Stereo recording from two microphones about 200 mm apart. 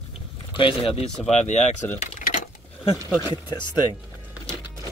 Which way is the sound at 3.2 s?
20° left (ahead or behind).